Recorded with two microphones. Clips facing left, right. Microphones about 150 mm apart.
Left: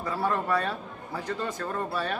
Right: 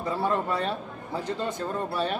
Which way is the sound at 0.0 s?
25° right (ahead or behind).